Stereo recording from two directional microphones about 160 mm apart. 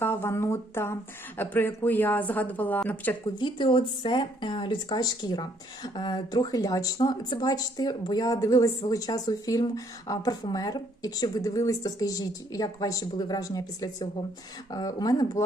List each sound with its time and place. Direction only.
0.0 s speech: 15° left (ahead or behind)
3.3 s speech: 30° left (ahead or behind)